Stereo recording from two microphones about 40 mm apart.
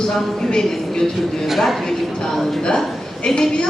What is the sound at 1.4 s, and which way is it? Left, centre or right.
Speech, centre.